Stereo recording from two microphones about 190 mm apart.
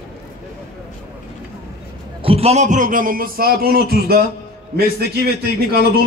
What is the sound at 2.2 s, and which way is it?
A man's voice, 30° right (ahead or behind).